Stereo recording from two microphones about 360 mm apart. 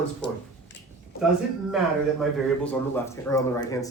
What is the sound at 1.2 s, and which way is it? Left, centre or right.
A man's voice, centre.